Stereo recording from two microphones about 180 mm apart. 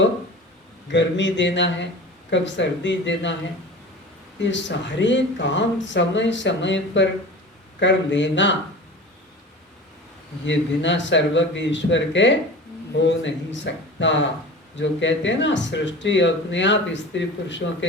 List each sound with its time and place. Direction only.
0.9 s speech: 85° left
4.4 s speech: 80° left
10.4 s speech: 90° left